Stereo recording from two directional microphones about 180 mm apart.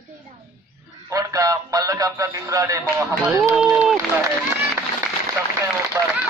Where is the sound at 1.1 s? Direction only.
20° right (ahead or behind).